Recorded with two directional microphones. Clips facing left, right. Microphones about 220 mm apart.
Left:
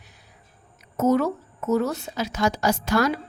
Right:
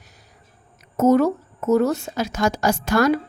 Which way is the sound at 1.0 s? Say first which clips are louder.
Right 4 dB; 45° right (ahead or behind).